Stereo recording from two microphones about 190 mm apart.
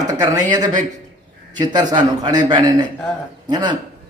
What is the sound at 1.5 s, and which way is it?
A man's voice, 20° right (ahead or behind).